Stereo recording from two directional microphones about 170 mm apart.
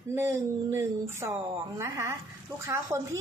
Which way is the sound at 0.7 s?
15° right (ahead or behind).